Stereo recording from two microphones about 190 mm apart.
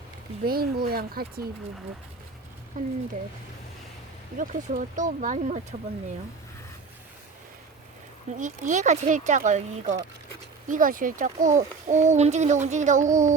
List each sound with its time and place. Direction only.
0.4 s speech: 50° right (ahead or behind)
2.8 s speech: 45° right (ahead or behind)
4.4 s a child's voice: 45° right (ahead or behind)
8.4 s a child's voice: 40° right (ahead or behind)